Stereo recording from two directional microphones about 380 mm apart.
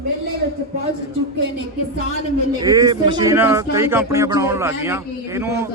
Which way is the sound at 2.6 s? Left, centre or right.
Centre.